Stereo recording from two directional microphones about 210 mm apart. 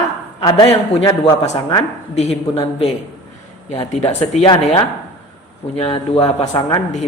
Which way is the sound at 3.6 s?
30° left (ahead or behind).